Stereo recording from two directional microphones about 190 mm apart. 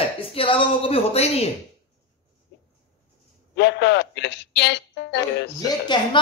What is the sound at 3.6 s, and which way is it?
Speech, 65° left (ahead or behind).